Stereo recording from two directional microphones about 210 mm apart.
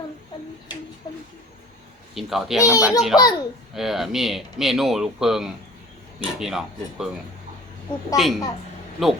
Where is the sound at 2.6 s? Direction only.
15° left (ahead or behind).